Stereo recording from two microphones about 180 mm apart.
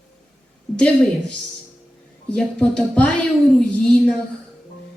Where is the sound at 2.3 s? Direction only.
5° left (ahead or behind).